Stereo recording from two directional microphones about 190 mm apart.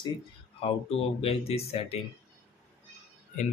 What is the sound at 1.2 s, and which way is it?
Speech, 30° left (ahead or behind).